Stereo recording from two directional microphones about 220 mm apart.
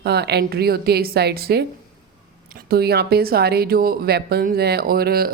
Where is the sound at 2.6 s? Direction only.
45° right (ahead or behind).